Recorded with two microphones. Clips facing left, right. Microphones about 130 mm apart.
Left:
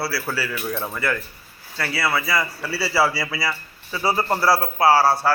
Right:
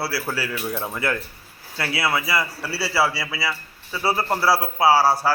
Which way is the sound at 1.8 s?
20° right (ahead or behind).